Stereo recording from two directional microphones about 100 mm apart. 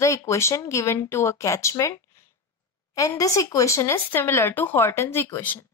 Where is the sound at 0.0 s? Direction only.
30° left (ahead or behind).